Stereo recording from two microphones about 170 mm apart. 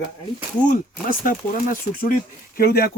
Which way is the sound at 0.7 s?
55° left (ahead or behind).